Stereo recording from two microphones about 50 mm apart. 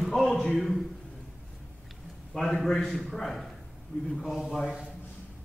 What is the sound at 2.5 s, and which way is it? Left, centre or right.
A man's voice, centre.